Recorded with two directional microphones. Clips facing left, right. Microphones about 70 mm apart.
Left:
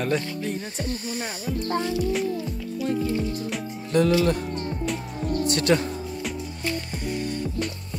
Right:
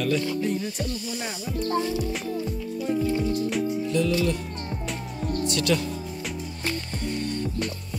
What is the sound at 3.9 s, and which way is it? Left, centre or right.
Music, left.